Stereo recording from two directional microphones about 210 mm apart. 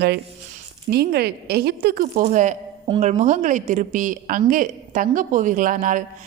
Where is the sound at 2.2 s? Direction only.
35° right (ahead or behind).